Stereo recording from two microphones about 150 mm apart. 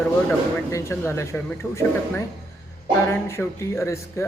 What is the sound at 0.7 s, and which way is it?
Speech, 15° left (ahead or behind).